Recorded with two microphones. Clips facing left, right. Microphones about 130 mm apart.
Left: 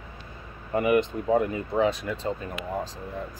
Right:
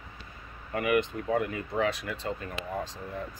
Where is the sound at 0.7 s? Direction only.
25° left (ahead or behind).